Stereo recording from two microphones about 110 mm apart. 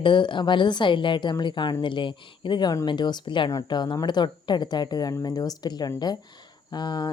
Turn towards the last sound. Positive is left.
turn(degrees=40)  # may be behind; listen again after turning